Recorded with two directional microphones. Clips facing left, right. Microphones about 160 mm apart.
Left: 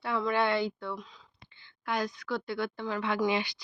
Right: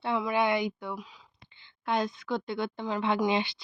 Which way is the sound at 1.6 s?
25° right (ahead or behind).